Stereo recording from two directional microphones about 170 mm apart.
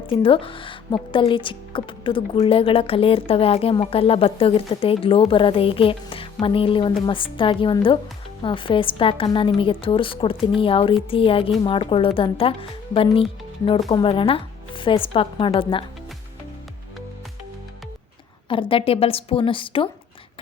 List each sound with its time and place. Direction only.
0.1 s a woman's voice: 30° left (ahead or behind)
18.4 s speech: 30° left (ahead or behind)